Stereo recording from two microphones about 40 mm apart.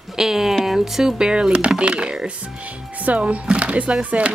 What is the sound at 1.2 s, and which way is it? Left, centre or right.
Speech, right.